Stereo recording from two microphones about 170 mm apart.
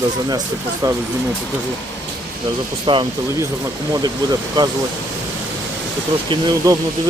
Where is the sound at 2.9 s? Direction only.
30° right (ahead or behind).